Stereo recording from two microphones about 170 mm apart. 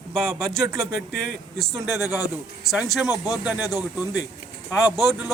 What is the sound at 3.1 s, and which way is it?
Speech, 20° left (ahead or behind).